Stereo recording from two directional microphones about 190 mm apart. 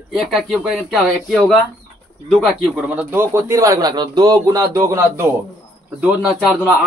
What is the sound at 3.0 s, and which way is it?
Speech, 10° right (ahead or behind).